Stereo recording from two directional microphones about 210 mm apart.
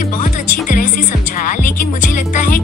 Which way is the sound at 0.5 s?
40° left (ahead or behind).